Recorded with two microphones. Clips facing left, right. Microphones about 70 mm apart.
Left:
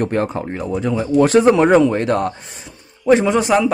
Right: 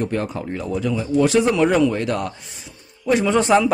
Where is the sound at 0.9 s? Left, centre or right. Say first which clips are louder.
Left 4 dB; left.